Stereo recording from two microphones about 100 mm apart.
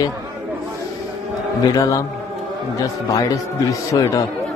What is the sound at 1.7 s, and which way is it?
A man's voice, 35° left (ahead or behind).